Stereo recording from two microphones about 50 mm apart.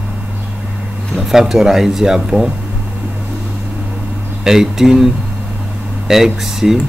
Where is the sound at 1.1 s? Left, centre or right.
Centre.